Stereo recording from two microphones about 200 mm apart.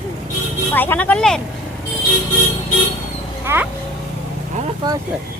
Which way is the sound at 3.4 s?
10° right (ahead or behind).